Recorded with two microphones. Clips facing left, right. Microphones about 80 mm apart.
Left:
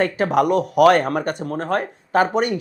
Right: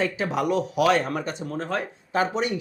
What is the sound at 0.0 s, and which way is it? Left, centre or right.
Speech, left.